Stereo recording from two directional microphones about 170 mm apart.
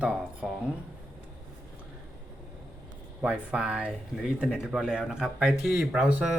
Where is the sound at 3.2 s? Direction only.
5° right (ahead or behind).